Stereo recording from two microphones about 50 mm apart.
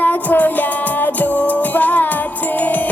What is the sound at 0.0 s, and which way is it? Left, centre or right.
Music, left.